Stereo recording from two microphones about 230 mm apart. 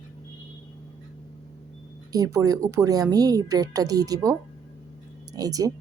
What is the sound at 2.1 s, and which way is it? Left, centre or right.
Speech, centre.